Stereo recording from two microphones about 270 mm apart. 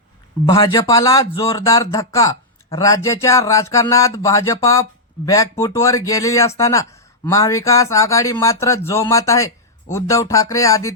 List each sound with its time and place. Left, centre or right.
0.4 s speech: centre